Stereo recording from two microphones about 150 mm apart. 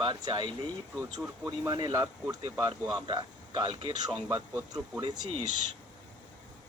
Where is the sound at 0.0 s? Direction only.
30° right (ahead or behind).